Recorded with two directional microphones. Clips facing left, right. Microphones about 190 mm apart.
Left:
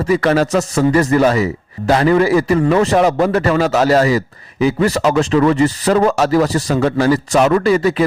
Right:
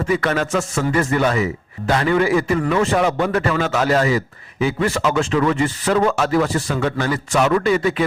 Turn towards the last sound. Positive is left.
turn(degrees=40)  # may be behind; listen again after turning